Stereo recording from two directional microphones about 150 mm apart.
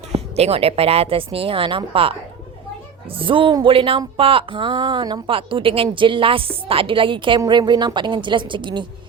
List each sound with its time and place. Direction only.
0.1 s speech: 45° right (ahead or behind)
3.2 s speech: 35° right (ahead or behind)